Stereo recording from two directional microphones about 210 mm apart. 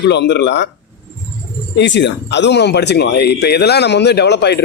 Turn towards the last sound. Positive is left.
turn(degrees=55)  # may be behind; listen again after turning